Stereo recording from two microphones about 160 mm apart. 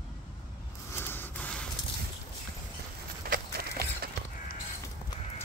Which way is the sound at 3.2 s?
70° right (ahead or behind).